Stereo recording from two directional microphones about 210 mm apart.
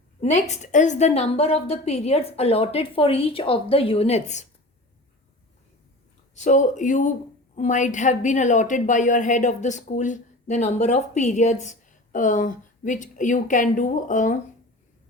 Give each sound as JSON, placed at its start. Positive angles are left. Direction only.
{"t": 0.2, "sound": "a woman's voice", "side_deg": 35}
{"t": 6.3, "sound": "a woman's voice", "side_deg": 35}